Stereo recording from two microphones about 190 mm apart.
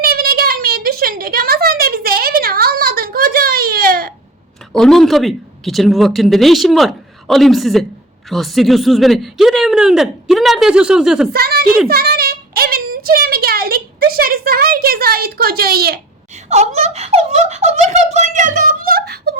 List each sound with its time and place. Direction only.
0.0 s a sound: 55° right (ahead or behind)
4.8 s speech: centre (ahead or behind)
11.3 s a woman's voice: 55° right (ahead or behind)
16.3 s speech: 35° right (ahead or behind); by 19.3 s 55° right (ahead or behind)